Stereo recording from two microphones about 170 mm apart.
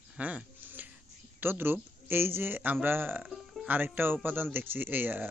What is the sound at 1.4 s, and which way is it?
A man's voice, 10° right (ahead or behind).